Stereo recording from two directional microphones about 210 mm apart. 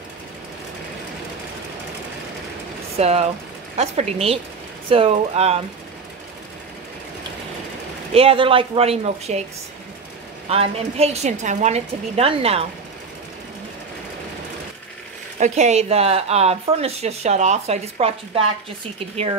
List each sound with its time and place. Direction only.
3.0 s a woman's voice: 30° right (ahead or behind)
8.1 s a woman's voice: 25° right (ahead or behind)
10.5 s a woman's voice: 30° right (ahead or behind)
15.3 s speech: 35° right (ahead or behind)